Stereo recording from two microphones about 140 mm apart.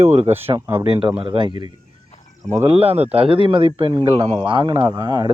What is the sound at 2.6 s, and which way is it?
Speech, 45° right (ahead or behind).